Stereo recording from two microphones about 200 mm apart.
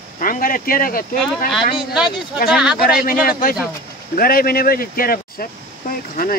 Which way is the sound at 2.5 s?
5° right (ahead or behind).